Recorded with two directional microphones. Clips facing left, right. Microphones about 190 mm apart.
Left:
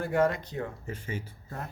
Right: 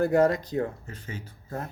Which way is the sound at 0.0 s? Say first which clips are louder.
Right 5 dB; 40° right (ahead or behind).